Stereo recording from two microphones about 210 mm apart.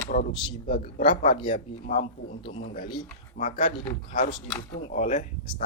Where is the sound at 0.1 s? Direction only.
35° left (ahead or behind).